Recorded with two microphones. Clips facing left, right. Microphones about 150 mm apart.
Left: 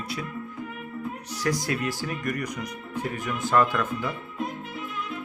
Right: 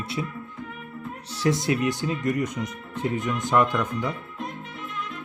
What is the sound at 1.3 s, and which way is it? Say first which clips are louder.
Speech: right 4 dB; 25° right (ahead or behind).